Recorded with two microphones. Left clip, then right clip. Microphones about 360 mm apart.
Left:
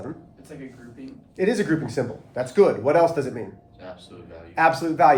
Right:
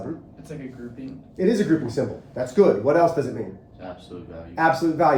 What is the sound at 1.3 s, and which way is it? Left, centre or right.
Speech, left.